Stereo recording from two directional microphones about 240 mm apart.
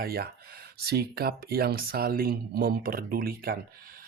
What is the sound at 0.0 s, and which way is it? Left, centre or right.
Speech, right.